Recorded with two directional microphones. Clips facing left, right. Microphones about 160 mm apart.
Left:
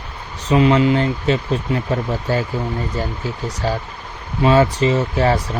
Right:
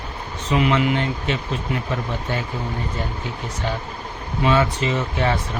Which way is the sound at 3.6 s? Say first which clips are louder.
Left 4 dB; 35° left (ahead or behind).